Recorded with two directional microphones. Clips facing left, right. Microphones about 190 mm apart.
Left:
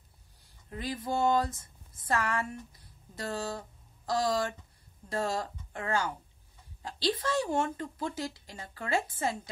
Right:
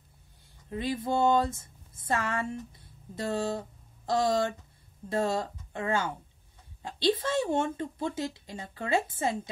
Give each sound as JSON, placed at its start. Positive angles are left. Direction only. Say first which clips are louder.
{"t": 0.7, "sound": "speech", "louder": "right 4 dB", "side_deg": -25}